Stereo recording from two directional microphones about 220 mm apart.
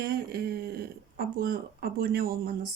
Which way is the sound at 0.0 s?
45° right (ahead or behind).